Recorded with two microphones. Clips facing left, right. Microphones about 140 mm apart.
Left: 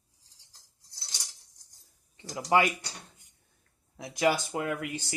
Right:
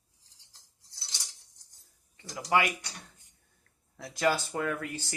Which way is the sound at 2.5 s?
25° left (ahead or behind).